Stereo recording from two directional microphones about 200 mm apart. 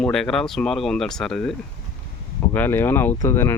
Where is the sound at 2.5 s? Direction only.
10° left (ahead or behind).